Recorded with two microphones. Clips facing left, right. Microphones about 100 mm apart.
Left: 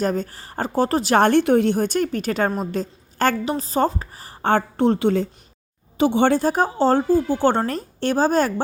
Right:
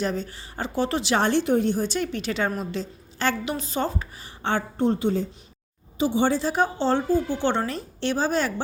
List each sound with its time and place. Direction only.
0.0 s a woman's voice: 45° left (ahead or behind)
4.8 s a woman's voice: 75° left (ahead or behind)
6.0 s a woman's voice: 65° left (ahead or behind); by 8.6 s 45° left (ahead or behind)